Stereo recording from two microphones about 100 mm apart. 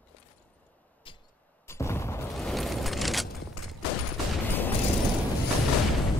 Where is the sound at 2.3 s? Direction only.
Centre (ahead or behind).